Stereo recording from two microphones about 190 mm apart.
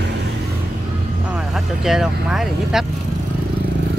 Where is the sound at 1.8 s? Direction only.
Centre (ahead or behind).